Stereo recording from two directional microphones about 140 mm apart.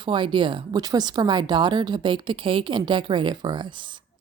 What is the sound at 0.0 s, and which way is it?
A woman's voice, 35° right (ahead or behind).